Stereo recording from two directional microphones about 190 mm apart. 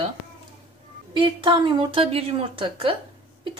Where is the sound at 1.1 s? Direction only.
25° right (ahead or behind).